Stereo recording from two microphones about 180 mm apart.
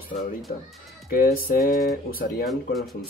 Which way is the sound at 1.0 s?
55° left (ahead or behind).